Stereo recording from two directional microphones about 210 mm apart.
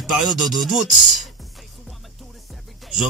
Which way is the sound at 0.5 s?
Centre (ahead or behind).